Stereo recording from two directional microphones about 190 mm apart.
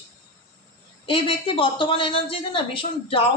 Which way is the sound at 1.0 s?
25° left (ahead or behind).